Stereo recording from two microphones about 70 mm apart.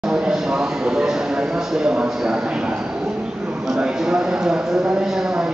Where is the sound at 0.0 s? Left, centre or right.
Centre.